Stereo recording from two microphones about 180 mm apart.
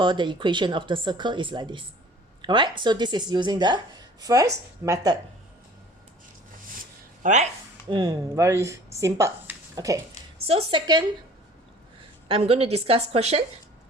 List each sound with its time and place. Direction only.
0.0 s speech: 25° right (ahead or behind)
7.2 s speech: 45° right (ahead or behind)
7.9 s speech: 20° right (ahead or behind)
10.4 s speech: 35° right (ahead or behind)
12.3 s a woman's voice: 30° right (ahead or behind)